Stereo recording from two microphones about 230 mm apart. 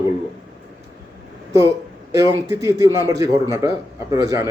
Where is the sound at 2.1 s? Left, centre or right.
Centre.